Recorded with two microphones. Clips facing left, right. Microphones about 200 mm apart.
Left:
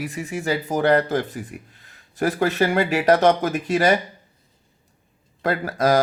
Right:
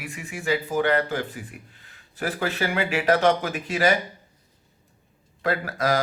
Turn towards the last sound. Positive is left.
turn(degrees=40)  # may be behind; listen again after turning